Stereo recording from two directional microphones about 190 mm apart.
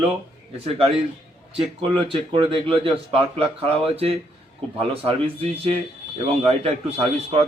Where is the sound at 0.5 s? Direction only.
30° right (ahead or behind).